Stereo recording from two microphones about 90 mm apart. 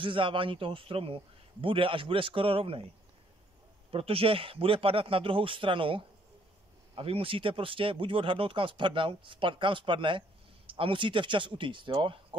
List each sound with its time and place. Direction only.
0.0 s speech: 70° right (ahead or behind); by 2.9 s 90° right
3.9 s speech: 90° right; by 6.0 s 75° right (ahead or behind)
7.0 s speech: 90° right; by 12.4 s 70° right (ahead or behind)